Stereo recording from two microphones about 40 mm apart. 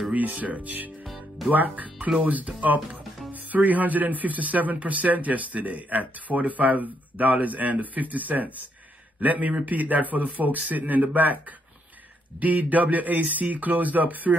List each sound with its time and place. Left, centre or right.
0.3 s speech: right
1.0 s music: centre
1.5 s speech: right
12.4 s speech: right